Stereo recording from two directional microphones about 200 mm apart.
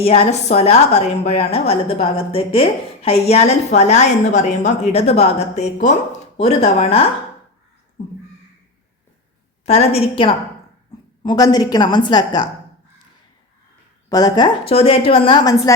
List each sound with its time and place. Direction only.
0.0 s a woman's voice: 30° left (ahead or behind)
9.6 s a woman's voice: 30° left (ahead or behind)
14.1 s a woman's voice: 20° left (ahead or behind)